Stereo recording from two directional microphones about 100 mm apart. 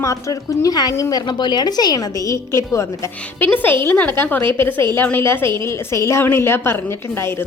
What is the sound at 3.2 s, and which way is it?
A woman's voice, 15° left (ahead or behind).